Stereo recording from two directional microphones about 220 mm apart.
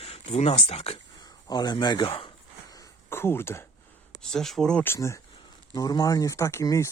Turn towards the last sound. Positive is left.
turn(degrees=15)  # may be behind; listen again after turning